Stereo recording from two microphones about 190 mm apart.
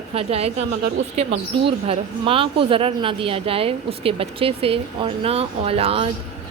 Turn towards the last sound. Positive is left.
turn(degrees=-30)  # may be behind; listen again after turning